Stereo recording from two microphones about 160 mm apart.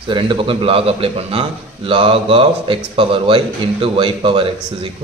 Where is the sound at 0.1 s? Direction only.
30° right (ahead or behind).